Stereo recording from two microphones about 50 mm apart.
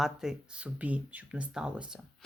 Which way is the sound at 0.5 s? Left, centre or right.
Right.